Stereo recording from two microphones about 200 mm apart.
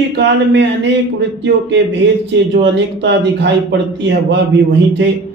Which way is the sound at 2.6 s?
60° right (ahead or behind).